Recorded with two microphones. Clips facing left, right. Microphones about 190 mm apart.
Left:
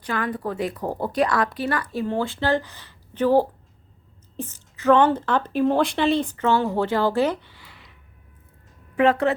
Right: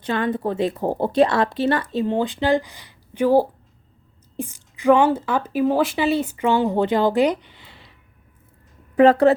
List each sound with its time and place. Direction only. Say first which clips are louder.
0.0 s speech: right 4 dB; 25° right (ahead or behind)
9.0 s speech: right 6 dB; 35° right (ahead or behind)